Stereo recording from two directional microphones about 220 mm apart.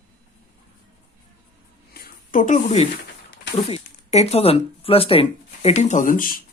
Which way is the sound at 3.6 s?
30° left (ahead or behind).